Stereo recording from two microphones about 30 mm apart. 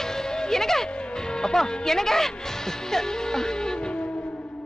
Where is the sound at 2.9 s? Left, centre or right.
Centre.